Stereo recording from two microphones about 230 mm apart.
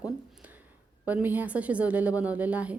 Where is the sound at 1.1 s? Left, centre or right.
Centre.